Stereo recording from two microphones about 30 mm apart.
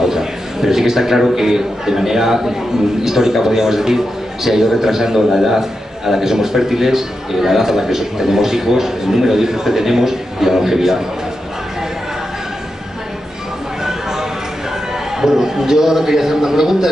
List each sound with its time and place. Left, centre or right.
0.0 s a sound: centre
1.2 s a man's voice: centre
15.1 s a man's voice: centre